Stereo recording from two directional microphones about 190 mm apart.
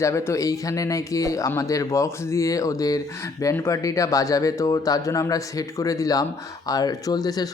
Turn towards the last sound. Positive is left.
turn(degrees=20)  # may be behind; listen again after turning